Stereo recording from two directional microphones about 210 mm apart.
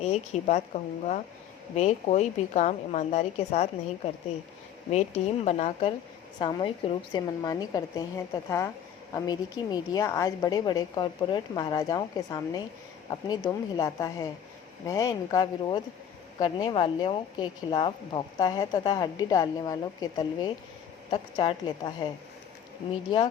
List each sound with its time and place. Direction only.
0.0 s a woman's voice: 30° left (ahead or behind)
5.5 s a woman's voice: 30° left (ahead or behind)